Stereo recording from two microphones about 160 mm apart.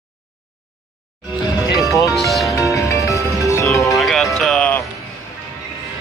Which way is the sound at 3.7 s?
Centre (ahead or behind).